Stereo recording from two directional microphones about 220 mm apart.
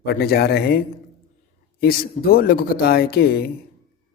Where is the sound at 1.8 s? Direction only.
40° left (ahead or behind).